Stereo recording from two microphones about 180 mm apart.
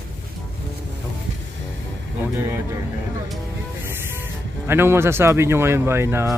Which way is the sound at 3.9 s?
15° right (ahead or behind).